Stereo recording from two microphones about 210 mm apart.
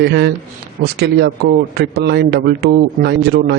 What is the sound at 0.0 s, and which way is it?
Speech, 55° right (ahead or behind).